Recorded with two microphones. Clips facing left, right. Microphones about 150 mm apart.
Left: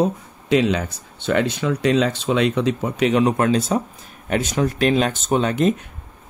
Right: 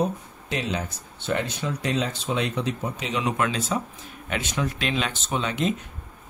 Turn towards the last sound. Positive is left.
turn(degrees=50)  # may be behind; listen again after turning